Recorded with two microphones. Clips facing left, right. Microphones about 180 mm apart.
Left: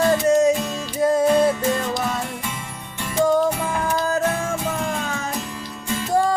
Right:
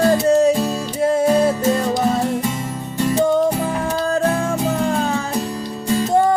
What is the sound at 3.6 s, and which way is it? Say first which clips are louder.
Music: right 2 dB; 35° right (ahead or behind).